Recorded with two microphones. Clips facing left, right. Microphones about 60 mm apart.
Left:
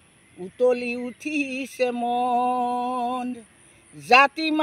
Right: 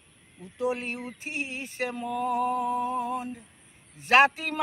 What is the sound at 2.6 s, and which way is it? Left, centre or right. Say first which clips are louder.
Speech: left 4 dB; left.